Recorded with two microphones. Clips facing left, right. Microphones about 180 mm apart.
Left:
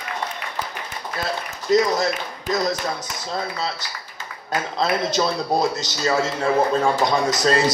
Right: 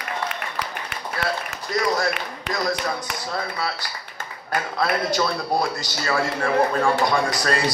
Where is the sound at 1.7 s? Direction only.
20° left (ahead or behind).